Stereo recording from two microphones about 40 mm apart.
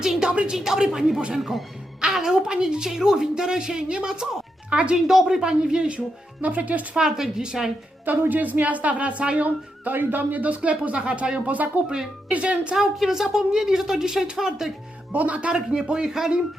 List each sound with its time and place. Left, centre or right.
0.0 s speech: centre
0.3 s speech: right
0.5 s speech: centre; by 4.9 s right
5.0 s speech: centre
6.4 s speech: right
6.9 s speech: centre
8.0 s speech: right
9.8 s speech: right
12.7 s speech: centre
15.1 s speech: right
15.5 s speech: centre